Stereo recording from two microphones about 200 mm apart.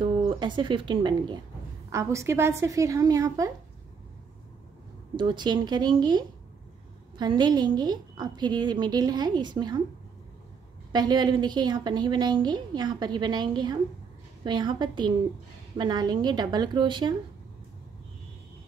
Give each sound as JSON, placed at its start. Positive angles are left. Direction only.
{"t": 0.0, "sound": "a woman's voice", "side_deg": -25}
{"t": 5.1, "sound": "a woman's voice", "side_deg": -20}
{"t": 10.9, "sound": "a woman's voice", "side_deg": -20}